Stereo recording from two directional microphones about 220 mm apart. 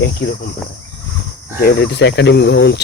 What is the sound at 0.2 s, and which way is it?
Speech, 55° left (ahead or behind).